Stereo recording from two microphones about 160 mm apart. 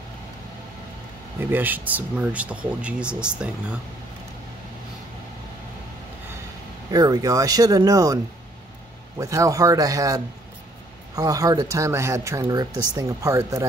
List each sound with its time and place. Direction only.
1.4 s speech: 10° right (ahead or behind)
6.9 s speech: 25° right (ahead or behind)
9.2 s speech: 20° right (ahead or behind)